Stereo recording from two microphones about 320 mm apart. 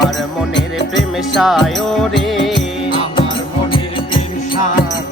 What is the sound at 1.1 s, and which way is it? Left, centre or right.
Music, centre.